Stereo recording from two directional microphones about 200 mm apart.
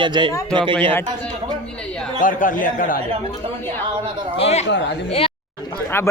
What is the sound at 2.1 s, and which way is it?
Speech, 40° left (ahead or behind).